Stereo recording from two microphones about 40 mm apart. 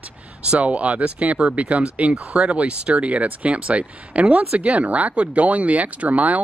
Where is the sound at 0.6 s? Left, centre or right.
Right.